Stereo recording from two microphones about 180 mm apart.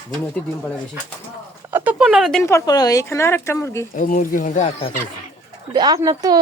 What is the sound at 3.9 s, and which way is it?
Speech, 50° left (ahead or behind).